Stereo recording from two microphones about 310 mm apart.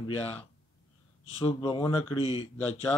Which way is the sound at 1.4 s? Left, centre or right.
Centre.